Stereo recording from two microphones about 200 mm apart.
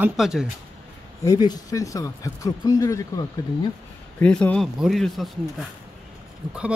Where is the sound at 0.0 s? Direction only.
5° right (ahead or behind).